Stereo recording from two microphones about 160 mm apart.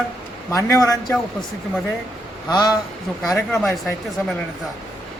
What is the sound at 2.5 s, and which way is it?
Speech, 25° left (ahead or behind).